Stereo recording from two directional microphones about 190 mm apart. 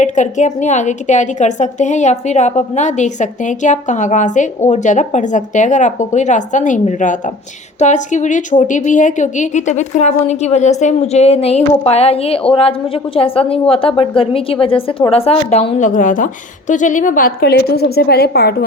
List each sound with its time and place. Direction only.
0.0 s a woman's voice: 40° left (ahead or behind); by 18.5 s 55° left (ahead or behind)